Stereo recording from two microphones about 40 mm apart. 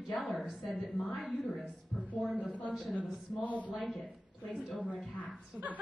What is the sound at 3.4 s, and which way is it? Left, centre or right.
Speech, left.